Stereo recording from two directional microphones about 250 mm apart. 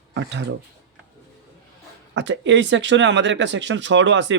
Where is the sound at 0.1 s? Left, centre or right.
Right.